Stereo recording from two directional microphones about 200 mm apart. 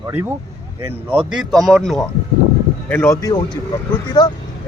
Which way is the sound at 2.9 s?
10° left (ahead or behind).